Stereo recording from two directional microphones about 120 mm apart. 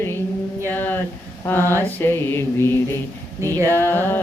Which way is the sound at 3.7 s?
20° left (ahead or behind).